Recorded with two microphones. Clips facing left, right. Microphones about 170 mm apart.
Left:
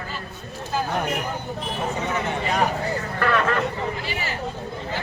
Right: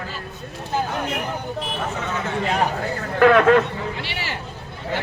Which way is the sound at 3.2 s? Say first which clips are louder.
Right 10 dB; 65° right (ahead or behind).